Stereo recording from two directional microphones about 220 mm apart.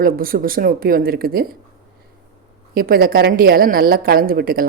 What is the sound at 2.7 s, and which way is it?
Speech, 40° right (ahead or behind).